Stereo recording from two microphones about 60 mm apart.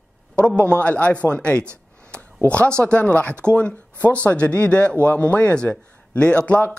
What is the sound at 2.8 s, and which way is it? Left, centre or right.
Speech, centre.